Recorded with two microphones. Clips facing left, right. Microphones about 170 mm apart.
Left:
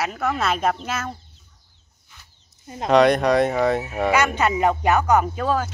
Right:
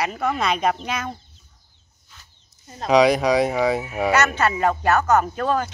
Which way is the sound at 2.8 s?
Centre (ahead or behind).